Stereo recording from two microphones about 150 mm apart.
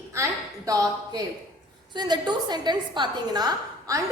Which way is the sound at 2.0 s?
30° right (ahead or behind).